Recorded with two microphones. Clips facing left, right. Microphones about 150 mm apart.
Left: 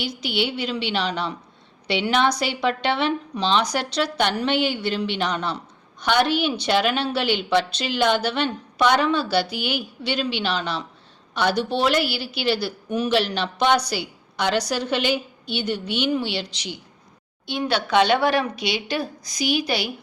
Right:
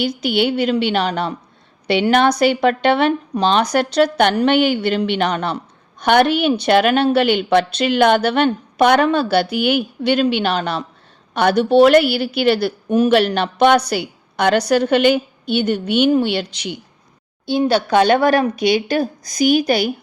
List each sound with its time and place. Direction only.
0.0 s a woman's voice: 55° right (ahead or behind)
17.4 s speech: 35° right (ahead or behind)